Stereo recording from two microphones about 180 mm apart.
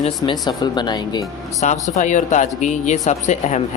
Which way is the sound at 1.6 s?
45° left (ahead or behind).